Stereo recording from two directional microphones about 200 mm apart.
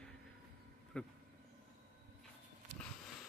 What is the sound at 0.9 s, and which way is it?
Speech, 5° left (ahead or behind).